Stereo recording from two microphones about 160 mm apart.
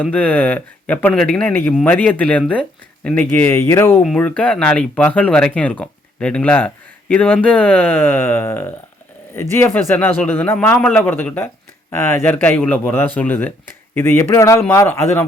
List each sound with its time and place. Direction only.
0.1 s speech: 10° left (ahead or behind)
3.9 s speech: 5° left (ahead or behind)